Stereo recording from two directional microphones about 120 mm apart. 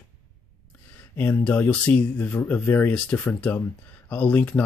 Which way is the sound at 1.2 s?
15° left (ahead or behind).